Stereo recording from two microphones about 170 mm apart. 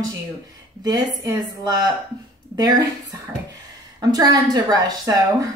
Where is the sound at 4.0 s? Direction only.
20° right (ahead or behind).